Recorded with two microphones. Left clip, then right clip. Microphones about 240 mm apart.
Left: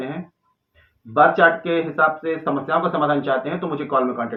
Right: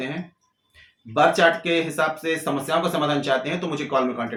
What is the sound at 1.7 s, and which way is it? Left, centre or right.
A man's voice, right.